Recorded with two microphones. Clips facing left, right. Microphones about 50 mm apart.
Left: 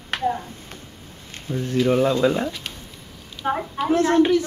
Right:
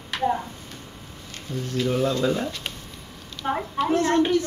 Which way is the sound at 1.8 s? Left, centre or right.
Left.